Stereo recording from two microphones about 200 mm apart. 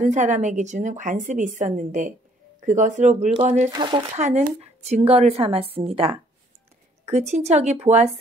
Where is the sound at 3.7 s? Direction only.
20° right (ahead or behind).